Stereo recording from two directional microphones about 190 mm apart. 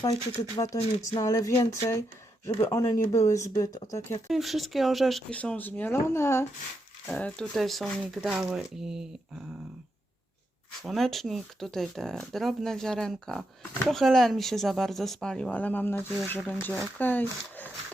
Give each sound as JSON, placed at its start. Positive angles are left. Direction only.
{"t": 0.3, "sound": "speech", "side_deg": 15}
{"t": 4.3, "sound": "speech", "side_deg": 0}
{"t": 10.8, "sound": "speech", "side_deg": 0}